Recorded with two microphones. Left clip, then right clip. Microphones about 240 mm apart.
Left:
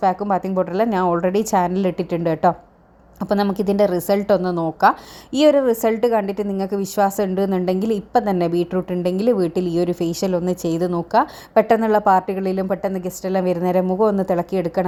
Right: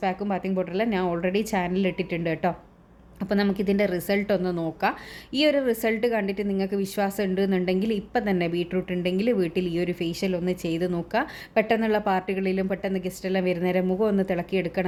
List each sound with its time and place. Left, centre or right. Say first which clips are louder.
0.0 s a woman's voice: left 9 dB; centre